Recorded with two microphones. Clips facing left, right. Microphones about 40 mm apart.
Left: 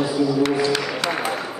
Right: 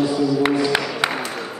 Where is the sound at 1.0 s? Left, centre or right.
Right.